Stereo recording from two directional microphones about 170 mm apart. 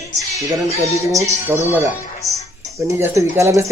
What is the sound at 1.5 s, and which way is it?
Speech, 10° right (ahead or behind).